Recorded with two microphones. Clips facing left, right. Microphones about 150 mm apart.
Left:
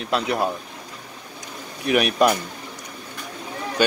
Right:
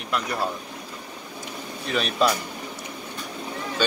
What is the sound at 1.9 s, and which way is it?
Speech, 65° left (ahead or behind).